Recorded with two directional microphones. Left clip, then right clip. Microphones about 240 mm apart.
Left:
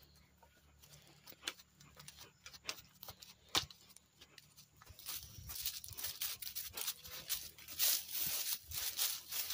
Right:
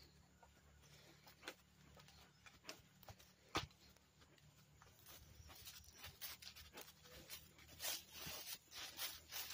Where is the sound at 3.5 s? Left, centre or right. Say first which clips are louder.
Left 8 dB; left.